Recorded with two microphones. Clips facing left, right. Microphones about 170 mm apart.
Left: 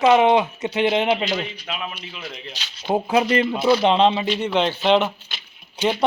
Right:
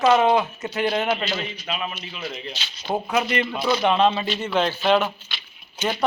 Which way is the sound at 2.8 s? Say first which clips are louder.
Left 4 dB; 25° left (ahead or behind).